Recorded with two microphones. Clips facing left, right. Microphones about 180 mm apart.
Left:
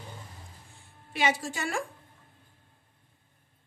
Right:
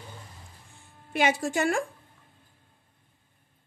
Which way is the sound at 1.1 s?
55° right (ahead or behind).